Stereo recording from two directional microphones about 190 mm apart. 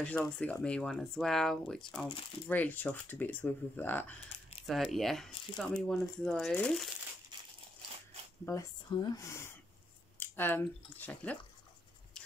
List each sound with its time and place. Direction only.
0.0 s speech: 5° left (ahead or behind)
8.5 s speech: 20° left (ahead or behind)